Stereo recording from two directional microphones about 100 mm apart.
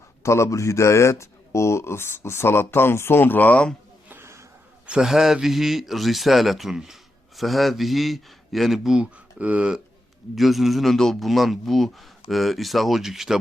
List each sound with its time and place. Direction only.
0.2 s speech: 30° left (ahead or behind); by 3.8 s 10° left (ahead or behind)
4.1 s a sound: 25° right (ahead or behind)
4.9 s a man's voice: 5° right (ahead or behind)